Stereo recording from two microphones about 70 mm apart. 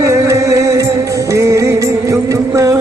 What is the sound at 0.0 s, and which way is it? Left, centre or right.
Music, right.